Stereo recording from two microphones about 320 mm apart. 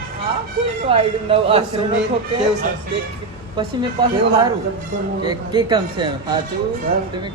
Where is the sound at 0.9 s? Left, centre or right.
Centre.